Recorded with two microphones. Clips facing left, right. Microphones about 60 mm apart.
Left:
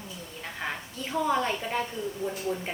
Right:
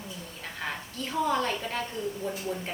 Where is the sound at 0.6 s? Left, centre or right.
Centre.